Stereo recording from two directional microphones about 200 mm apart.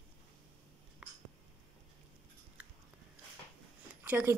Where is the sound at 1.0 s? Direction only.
5° right (ahead or behind).